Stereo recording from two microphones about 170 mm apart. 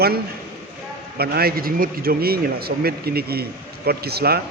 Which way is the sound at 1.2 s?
65° right (ahead or behind).